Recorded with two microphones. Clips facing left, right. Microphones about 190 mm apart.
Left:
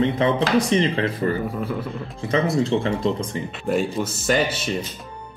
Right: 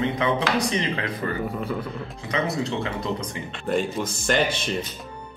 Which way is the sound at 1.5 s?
Centre (ahead or behind).